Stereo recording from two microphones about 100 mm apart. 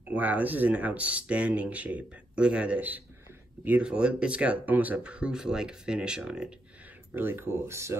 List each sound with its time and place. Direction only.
0.1 s speech: 15° right (ahead or behind)
7.2 s speech: 20° right (ahead or behind)